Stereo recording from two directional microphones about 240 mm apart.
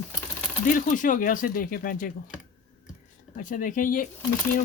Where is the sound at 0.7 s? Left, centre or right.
Left.